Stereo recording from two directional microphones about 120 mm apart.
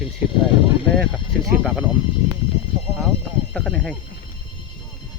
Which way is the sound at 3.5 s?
5° left (ahead or behind).